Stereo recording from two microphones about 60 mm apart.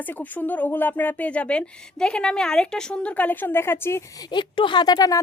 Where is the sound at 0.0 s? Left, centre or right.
Left.